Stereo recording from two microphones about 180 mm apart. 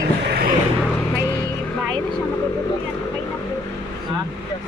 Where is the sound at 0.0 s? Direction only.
60° right (ahead or behind).